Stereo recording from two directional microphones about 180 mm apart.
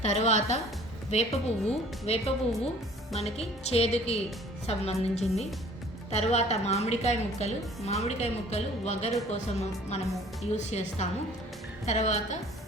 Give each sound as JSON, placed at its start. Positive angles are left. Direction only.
{"t": 0.0, "sound": "a woman's voice", "side_deg": 40}